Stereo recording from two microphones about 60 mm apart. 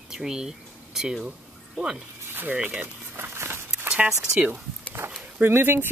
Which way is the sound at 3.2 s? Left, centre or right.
Right.